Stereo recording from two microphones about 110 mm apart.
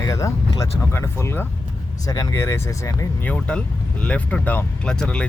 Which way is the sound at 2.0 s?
35° left (ahead or behind).